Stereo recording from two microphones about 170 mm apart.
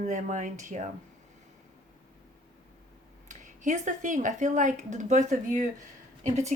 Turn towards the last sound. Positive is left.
turn(degrees=-40)  # may be behind; listen again after turning